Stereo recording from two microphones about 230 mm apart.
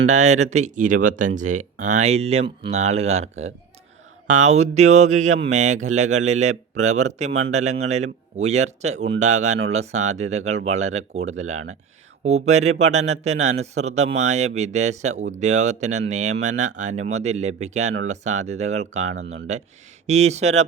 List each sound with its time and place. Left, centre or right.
0.1 s speech: right